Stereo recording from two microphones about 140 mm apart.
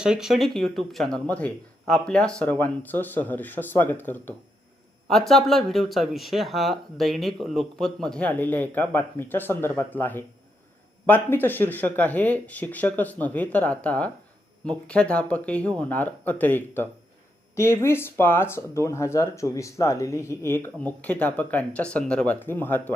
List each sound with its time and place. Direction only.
0.0 s speech: 5° right (ahead or behind); by 4.4 s 15° left (ahead or behind)
5.0 s speech: 5° left (ahead or behind)